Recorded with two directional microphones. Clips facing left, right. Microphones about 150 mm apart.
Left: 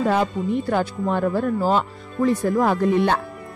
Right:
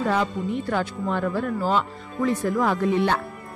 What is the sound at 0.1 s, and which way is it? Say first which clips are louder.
Speech: left 3 dB; 45° left (ahead or behind).